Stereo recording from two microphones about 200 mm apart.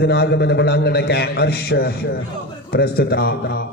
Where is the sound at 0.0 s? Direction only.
55° left (ahead or behind).